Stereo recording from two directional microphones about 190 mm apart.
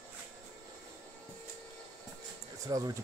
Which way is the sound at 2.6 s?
20° right (ahead or behind).